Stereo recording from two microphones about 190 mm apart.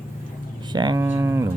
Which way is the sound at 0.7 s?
20° right (ahead or behind).